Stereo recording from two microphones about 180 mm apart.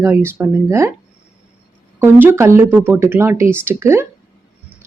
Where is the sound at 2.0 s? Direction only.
15° right (ahead or behind).